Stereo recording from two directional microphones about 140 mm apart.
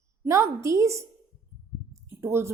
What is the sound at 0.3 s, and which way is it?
A woman's voice, 20° right (ahead or behind).